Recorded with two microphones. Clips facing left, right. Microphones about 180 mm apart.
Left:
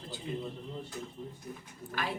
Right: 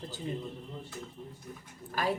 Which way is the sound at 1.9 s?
40° right (ahead or behind).